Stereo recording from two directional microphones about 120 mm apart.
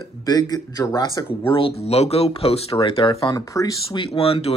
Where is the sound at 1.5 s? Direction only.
55° left (ahead or behind).